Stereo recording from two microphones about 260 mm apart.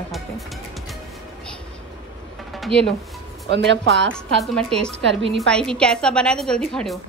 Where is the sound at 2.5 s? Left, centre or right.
Centre.